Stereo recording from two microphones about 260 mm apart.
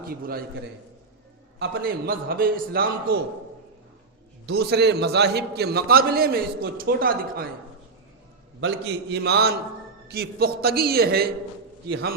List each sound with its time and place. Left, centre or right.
0.0 s a man's voice: right
1.5 s a man's voice: right
4.4 s a man's voice: right
8.6 s a man's voice: right